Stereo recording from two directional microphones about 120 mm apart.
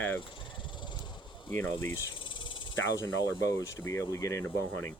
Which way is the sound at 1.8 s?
20° left (ahead or behind).